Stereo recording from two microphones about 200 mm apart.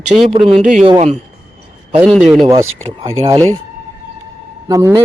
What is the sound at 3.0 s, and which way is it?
Speech, 15° right (ahead or behind).